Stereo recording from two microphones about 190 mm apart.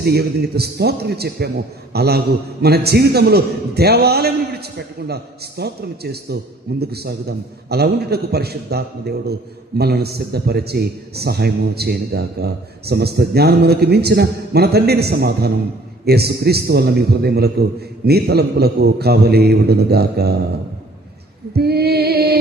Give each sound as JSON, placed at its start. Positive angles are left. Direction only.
{"t": 0.0, "sound": "a man's voice", "side_deg": -55}
{"t": 21.5, "sound": "music", "side_deg": -55}